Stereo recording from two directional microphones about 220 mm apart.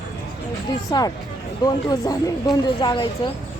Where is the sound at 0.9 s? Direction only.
20° left (ahead or behind).